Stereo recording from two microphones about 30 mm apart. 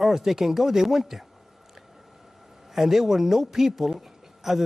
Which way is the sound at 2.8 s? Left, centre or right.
Centre.